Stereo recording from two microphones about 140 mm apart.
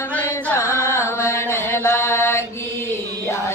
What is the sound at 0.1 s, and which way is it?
Carnatic music, 15° left (ahead or behind).